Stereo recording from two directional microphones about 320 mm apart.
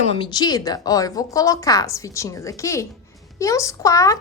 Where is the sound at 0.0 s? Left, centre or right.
Centre.